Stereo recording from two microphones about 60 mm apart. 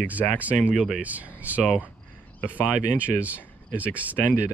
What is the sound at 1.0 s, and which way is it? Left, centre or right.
Speech, right.